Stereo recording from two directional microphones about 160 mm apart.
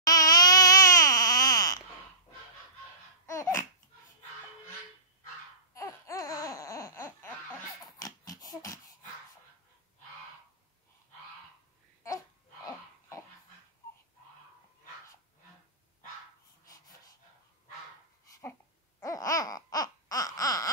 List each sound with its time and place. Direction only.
0.0 s baby cry: 25° left (ahead or behind)
3.3 s babbling: 20° left (ahead or behind)
5.8 s laughter: 20° left (ahead or behind)
7.8 s a sound: 25° left (ahead or behind)
16.6 s dog: 20° left (ahead or behind)
18.9 s babbling: 20° left (ahead or behind)